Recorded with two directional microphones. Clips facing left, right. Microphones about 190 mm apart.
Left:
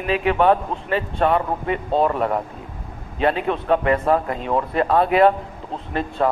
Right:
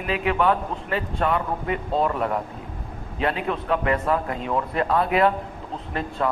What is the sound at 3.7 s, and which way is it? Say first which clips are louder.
Speech: left 5 dB; 30° left (ahead or behind).